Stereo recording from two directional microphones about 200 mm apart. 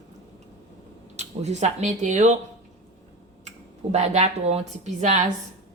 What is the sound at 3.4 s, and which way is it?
Speech, 35° right (ahead or behind).